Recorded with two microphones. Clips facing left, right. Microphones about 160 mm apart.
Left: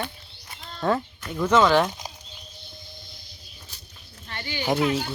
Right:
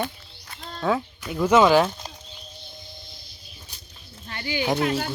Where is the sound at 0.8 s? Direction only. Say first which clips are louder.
Even; centre (ahead or behind).